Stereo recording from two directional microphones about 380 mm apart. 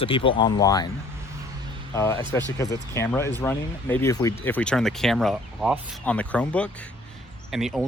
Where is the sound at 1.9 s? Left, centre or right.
Centre.